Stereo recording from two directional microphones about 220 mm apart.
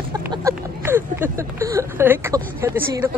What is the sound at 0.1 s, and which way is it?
Speech, 15° right (ahead or behind).